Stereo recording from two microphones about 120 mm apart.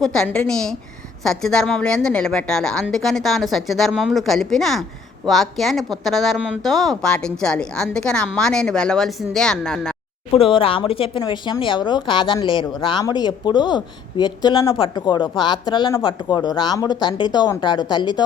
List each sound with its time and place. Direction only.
0.0 s speech: 5° left (ahead or behind)
10.3 s speech: 50° left (ahead or behind)
11.2 s a woman's voice: 35° left (ahead or behind)